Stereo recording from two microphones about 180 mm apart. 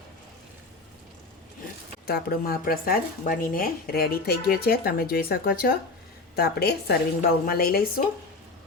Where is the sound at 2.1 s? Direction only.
60° left (ahead or behind).